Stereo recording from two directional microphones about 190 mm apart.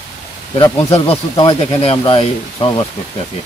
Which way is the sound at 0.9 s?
30° left (ahead or behind).